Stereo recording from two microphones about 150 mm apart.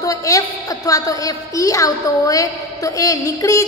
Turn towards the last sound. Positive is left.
turn(degrees=20)  # may be behind; listen again after turning